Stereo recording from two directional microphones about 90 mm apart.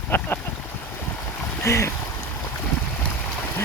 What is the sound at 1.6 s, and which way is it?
Speech, 30° left (ahead or behind).